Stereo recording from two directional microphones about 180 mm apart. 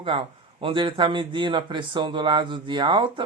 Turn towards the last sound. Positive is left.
turn(degrees=-25)  # may be behind; listen again after turning